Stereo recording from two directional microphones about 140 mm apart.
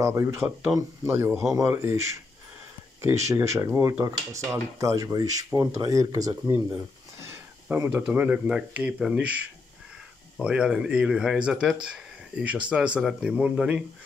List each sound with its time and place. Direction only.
0.0 s speech: 20° right (ahead or behind)
3.3 s speech: 20° right (ahead or behind)
7.7 s speech: 10° right (ahead or behind)